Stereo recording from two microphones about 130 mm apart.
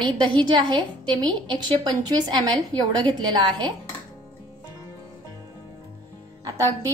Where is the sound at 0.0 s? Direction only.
35° right (ahead or behind).